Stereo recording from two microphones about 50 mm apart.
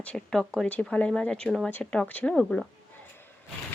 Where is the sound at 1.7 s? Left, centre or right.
Left.